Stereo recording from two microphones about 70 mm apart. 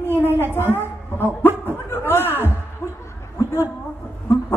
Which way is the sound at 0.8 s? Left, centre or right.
Left.